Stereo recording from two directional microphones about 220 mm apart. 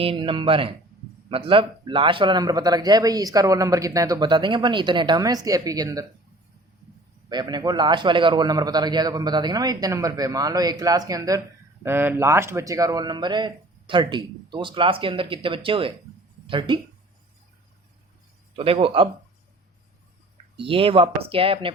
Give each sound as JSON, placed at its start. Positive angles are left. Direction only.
{"t": 0.0, "sound": "a man's voice", "side_deg": -25}
{"t": 7.3, "sound": "a man's voice", "side_deg": -20}
{"t": 18.5, "sound": "speech", "side_deg": -25}
{"t": 20.6, "sound": "speech", "side_deg": -25}